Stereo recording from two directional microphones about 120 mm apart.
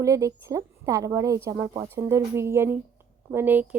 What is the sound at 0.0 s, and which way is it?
A woman's voice, 25° right (ahead or behind).